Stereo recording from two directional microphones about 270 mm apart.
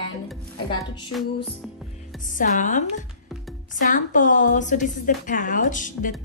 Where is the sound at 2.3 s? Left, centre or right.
Left.